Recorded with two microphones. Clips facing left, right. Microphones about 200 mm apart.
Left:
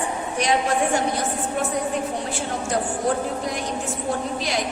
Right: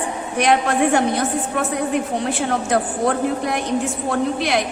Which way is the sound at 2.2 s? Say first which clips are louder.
Right 6 dB; 70° right (ahead or behind).